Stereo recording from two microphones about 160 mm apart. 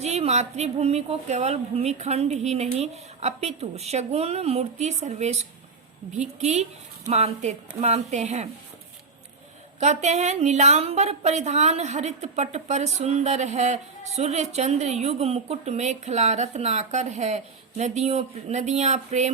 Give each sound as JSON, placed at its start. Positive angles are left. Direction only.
{"t": 0.0, "sound": "a woman's voice", "side_deg": -40}
{"t": 9.8, "sound": "a woman's voice", "side_deg": -45}